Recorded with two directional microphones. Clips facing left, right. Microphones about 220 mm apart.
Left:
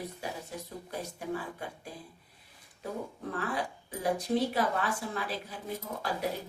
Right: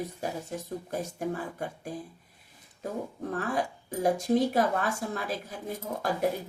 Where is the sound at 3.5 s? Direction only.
45° right (ahead or behind).